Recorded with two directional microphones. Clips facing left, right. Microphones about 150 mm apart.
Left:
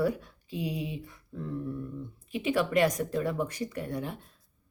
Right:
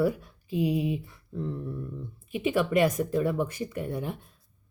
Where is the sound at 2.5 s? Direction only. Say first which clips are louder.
Right 2 dB; 10° right (ahead or behind).